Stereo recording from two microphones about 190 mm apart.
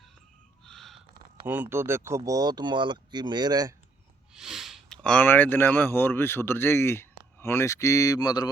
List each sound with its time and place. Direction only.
0.6 s a sound: centre (ahead or behind)
1.5 s speech: 10° right (ahead or behind)
4.4 s speech: centre (ahead or behind); by 8.4 s 20° left (ahead or behind)